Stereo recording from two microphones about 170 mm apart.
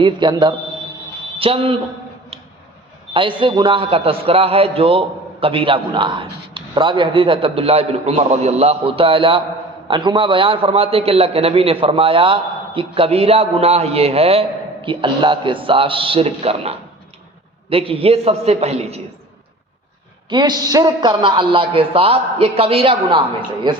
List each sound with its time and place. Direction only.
0.0 s a man's voice: 25° right (ahead or behind)
3.1 s a man's voice: 30° right (ahead or behind)
20.3 s a man's voice: 25° right (ahead or behind)